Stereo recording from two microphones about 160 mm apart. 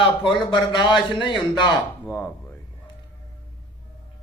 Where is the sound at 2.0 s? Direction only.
15° left (ahead or behind).